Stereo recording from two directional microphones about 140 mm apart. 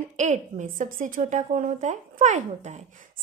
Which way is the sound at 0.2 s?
60° right (ahead or behind).